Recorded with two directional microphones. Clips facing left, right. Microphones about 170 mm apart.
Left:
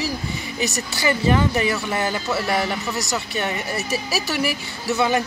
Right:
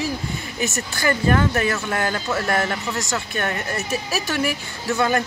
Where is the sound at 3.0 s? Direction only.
20° left (ahead or behind).